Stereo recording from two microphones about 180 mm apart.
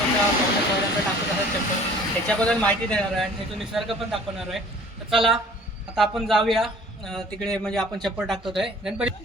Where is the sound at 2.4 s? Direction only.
5° left (ahead or behind).